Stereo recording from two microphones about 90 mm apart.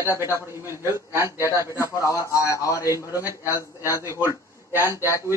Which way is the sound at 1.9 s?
35° left (ahead or behind).